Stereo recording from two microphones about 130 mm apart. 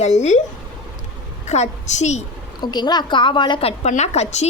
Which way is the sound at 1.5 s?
60° left (ahead or behind).